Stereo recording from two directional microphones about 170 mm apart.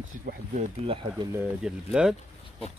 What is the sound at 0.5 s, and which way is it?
Speech, 35° right (ahead or behind).